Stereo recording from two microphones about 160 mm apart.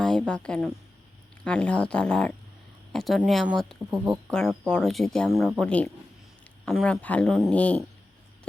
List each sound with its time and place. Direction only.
0.0 s speech: 5° left (ahead or behind)
3.9 s speech: 15° right (ahead or behind)
4.3 s speech: 5° left (ahead or behind)
7.0 s speech: 10° left (ahead or behind)